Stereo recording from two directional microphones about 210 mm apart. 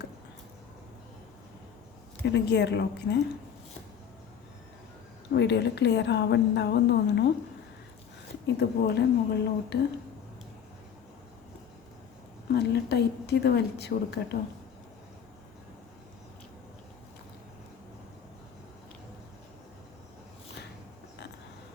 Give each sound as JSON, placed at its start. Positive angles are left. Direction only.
{"t": 2.2, "sound": "a woman's voice", "side_deg": 55}
{"t": 5.3, "sound": "a woman's voice", "side_deg": 55}
{"t": 8.5, "sound": "a woman's voice", "side_deg": 50}
{"t": 12.5, "sound": "a woman's voice", "side_deg": 50}